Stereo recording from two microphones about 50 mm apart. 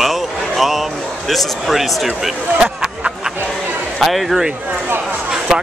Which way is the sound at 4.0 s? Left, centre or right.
Centre.